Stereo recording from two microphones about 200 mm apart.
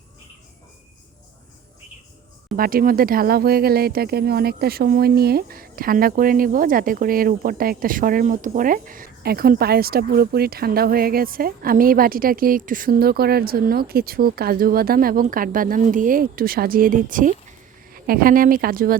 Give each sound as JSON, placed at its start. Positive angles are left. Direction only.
{"t": 2.6, "sound": "speech", "side_deg": -45}